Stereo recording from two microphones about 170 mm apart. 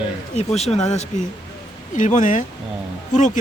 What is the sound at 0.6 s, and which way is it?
Speech, 40° left (ahead or behind).